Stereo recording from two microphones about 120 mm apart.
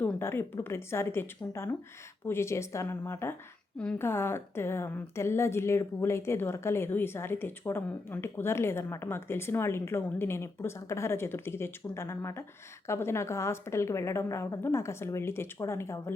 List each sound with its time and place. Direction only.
0.0 s a woman's voice: 20° left (ahead or behind)